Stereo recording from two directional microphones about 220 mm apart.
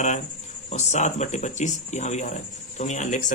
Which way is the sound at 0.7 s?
30° left (ahead or behind).